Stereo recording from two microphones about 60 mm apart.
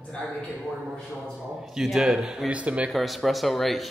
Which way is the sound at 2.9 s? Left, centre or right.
Centre.